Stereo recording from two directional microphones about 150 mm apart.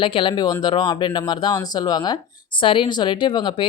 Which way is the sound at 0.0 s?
35° left (ahead or behind).